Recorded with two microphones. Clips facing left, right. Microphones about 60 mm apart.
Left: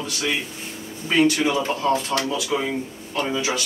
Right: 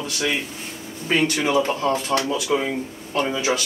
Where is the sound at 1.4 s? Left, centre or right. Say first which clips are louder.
Right 1 dB; right.